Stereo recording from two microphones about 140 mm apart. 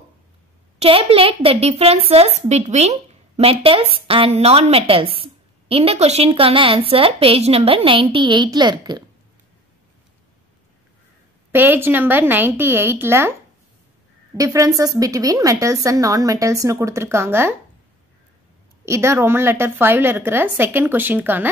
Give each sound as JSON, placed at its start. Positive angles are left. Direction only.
{"t": 0.7, "sound": "a child's voice", "side_deg": -45}
{"t": 11.5, "sound": "a woman's voice", "side_deg": -15}
{"t": 14.3, "sound": "a woman's voice", "side_deg": -25}
{"t": 18.9, "sound": "a woman's voice", "side_deg": -20}